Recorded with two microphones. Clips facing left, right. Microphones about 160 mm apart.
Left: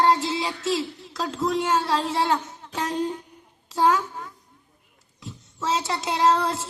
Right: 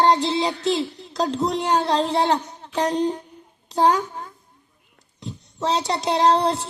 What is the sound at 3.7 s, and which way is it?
Speech, 35° right (ahead or behind).